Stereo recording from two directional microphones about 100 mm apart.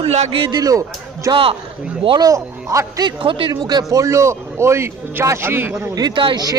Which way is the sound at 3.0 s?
55° right (ahead or behind).